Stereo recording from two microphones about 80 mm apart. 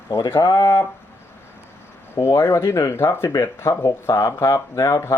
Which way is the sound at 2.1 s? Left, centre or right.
Left.